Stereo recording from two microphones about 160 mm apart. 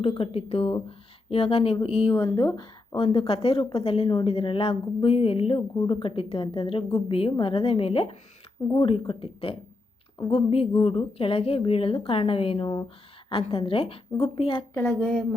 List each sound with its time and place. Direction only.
0.0 s a woman's voice: 35° left (ahead or behind)
2.1 s a woman's voice: 20° left (ahead or behind)
14.7 s a woman's voice: 15° left (ahead or behind)
14.9 s a woman's voice: 5° left (ahead or behind)